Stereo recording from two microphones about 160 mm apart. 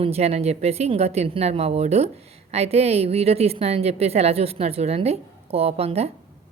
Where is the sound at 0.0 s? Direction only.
40° right (ahead or behind).